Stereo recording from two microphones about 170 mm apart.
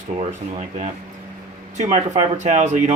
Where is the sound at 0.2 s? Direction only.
40° right (ahead or behind).